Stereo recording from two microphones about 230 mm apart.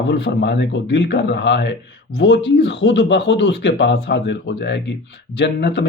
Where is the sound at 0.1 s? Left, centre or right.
Left.